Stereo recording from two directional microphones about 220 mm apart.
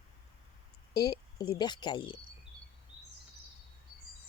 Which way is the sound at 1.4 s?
20° left (ahead or behind).